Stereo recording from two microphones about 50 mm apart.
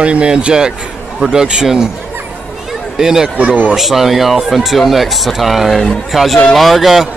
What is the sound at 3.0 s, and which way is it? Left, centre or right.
Speech, centre.